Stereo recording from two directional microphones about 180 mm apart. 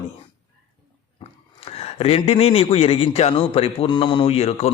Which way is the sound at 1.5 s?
35° left (ahead or behind).